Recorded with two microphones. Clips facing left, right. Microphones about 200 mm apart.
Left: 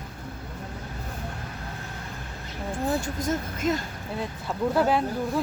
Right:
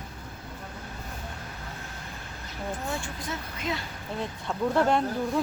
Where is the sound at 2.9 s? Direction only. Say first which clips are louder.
Left 7 dB; 40° left (ahead or behind).